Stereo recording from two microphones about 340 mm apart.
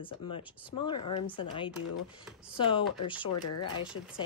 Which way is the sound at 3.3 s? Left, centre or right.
Left.